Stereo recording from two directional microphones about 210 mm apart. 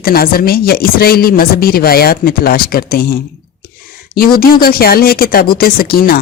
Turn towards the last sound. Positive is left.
turn(degrees=45)  # may be behind; listen again after turning